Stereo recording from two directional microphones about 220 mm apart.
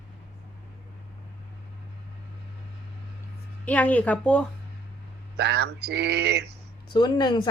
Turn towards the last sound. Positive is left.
turn(degrees=20)  # may be behind; listen again after turning